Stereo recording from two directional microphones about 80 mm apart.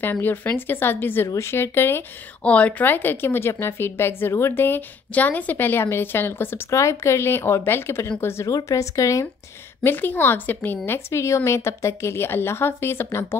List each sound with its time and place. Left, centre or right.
0.0 s a woman's voice: left
2.4 s a woman's voice: centre; by 8.5 s left
8.5 s a woman's voice: left
9.8 s a woman's voice: left
10.9 s a woman's voice: left